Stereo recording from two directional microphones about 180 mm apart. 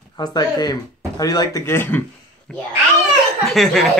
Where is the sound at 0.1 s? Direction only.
20° left (ahead or behind).